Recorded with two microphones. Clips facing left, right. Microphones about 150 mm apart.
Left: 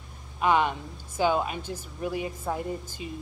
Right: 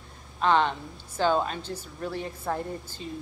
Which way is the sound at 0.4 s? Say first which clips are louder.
Even; 10° left (ahead or behind).